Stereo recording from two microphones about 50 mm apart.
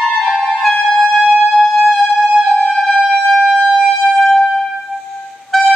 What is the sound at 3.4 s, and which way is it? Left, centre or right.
Siren, centre.